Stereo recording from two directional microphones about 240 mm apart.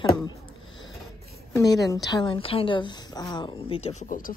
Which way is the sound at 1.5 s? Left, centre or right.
Centre.